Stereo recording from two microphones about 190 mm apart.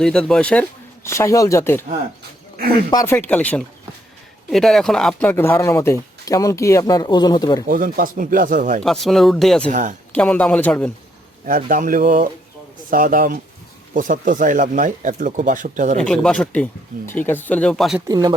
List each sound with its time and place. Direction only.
0.0 s speech: 5° left (ahead or behind)
2.9 s speech: 15° left (ahead or behind)
7.7 s speech: 50° right (ahead or behind)
8.8 s speech: centre (ahead or behind)
11.4 s speech: 45° right (ahead or behind)
16.0 s speech: 5° left (ahead or behind)
18.1 s speech: 20° right (ahead or behind)